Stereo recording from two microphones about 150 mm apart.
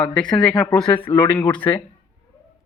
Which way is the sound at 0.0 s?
5° left (ahead or behind).